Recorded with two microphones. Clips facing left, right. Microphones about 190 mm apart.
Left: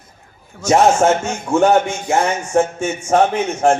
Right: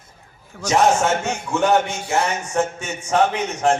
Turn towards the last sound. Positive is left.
turn(degrees=45)  # may be behind; listen again after turning